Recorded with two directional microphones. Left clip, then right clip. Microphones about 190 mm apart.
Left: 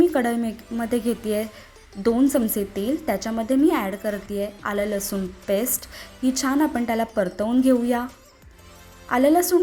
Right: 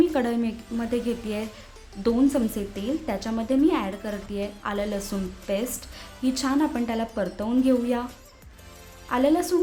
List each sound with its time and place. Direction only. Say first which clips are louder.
0.0 s speech: left 3 dB; 15° left (ahead or behind)
9.0 s speech: left 4 dB; 20° left (ahead or behind)